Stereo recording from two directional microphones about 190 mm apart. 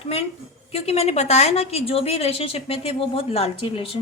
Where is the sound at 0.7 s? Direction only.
35° left (ahead or behind).